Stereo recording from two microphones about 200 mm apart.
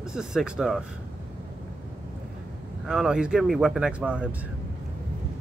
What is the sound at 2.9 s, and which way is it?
Speech, 5° right (ahead or behind).